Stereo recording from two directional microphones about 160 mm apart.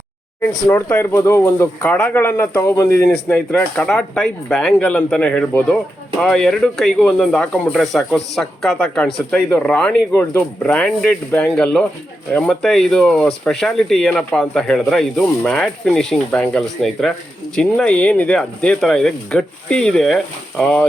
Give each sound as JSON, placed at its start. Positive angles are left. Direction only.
{"t": 0.9, "sound": "speech", "side_deg": 15}
{"t": 3.1, "sound": "speech", "side_deg": 10}